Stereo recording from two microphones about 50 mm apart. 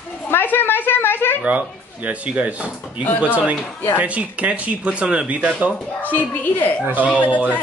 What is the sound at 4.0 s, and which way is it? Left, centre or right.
Speech, right.